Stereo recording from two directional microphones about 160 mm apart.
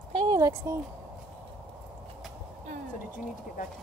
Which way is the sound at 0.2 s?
25° right (ahead or behind).